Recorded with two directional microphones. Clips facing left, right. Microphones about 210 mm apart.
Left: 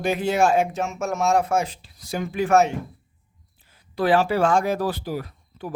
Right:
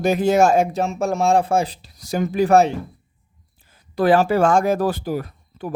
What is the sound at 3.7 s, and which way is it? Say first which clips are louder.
Speech: right 4 dB; 45° right (ahead or behind).